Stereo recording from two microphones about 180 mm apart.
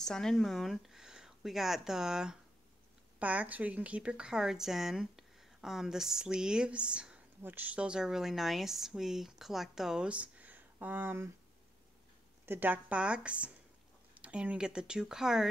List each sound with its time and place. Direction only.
0.0 s a woman's voice: 5° left (ahead or behind)
12.4 s a woman's voice: 10° right (ahead or behind)